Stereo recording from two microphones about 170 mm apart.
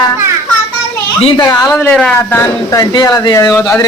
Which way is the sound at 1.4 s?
20° left (ahead or behind).